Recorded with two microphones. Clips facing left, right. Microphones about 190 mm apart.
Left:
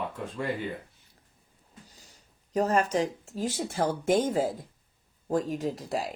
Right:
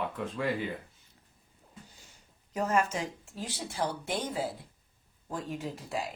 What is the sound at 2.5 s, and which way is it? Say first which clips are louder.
Speech: left 4 dB; 35° left (ahead or behind).